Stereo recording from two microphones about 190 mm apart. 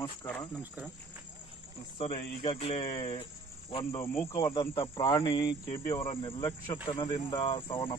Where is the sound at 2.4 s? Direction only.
30° left (ahead or behind).